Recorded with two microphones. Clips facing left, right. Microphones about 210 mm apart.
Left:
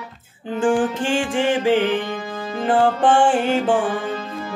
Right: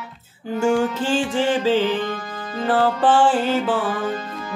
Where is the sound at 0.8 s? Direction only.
15° left (ahead or behind).